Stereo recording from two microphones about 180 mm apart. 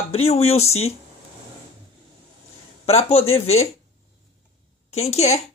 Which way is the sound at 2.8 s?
35° left (ahead or behind).